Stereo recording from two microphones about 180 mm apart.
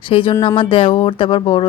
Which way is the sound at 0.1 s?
30° left (ahead or behind).